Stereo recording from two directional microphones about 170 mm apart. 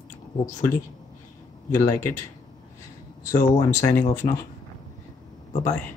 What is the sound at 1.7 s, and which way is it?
Speech, 15° left (ahead or behind).